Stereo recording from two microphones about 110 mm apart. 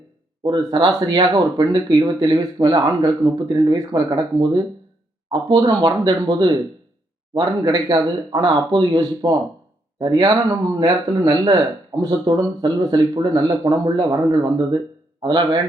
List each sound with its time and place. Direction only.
0.4 s speech: 45° right (ahead or behind)
5.3 s speech: 40° right (ahead or behind)
8.3 s a man's voice: 45° right (ahead or behind)